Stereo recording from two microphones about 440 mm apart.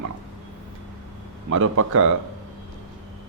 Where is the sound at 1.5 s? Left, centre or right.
Right.